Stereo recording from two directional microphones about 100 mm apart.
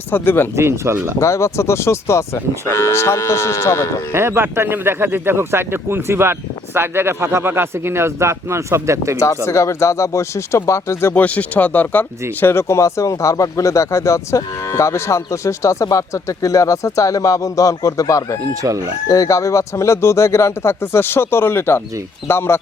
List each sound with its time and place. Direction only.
0.1 s speech: 20° left (ahead or behind)
0.5 s speech: 25° right (ahead or behind)
1.2 s speech: 30° left (ahead or behind)
4.1 s speech: 25° right (ahead or behind)
9.1 s speech: 30° left (ahead or behind)